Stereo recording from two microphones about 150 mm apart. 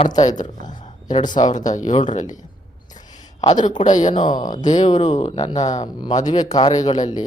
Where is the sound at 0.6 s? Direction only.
55° left (ahead or behind).